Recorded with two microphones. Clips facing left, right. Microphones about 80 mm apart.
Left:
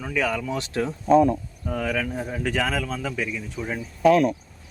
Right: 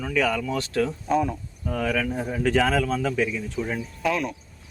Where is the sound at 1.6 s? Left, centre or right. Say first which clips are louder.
Right 1 dB; centre.